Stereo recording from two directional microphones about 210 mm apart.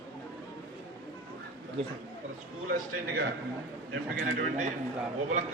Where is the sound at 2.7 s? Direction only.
50° right (ahead or behind).